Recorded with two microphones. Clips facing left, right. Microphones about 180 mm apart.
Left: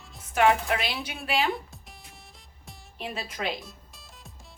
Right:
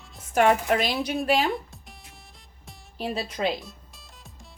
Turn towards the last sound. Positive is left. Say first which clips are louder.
# right 4 dB
turn(degrees=0)  # may be behind; listen again after turning